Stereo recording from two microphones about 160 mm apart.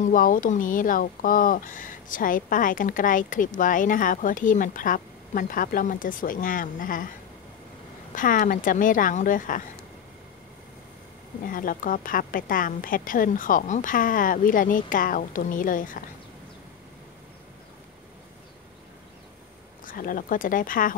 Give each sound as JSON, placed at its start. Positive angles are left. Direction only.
{"t": 0.0, "sound": "speech", "side_deg": 60}
{"t": 8.1, "sound": "speech", "side_deg": 55}
{"t": 11.4, "sound": "speech", "side_deg": 60}
{"t": 19.8, "sound": "speech", "side_deg": 60}